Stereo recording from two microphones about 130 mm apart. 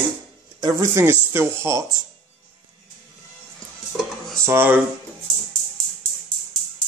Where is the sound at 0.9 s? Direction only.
20° right (ahead or behind).